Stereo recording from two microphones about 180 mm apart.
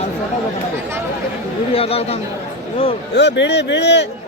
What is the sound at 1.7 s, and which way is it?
Speech, 35° left (ahead or behind).